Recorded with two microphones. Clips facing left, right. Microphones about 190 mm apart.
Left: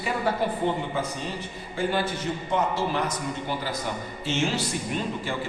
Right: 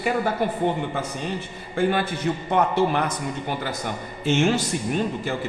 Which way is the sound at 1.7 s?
60° right (ahead or behind).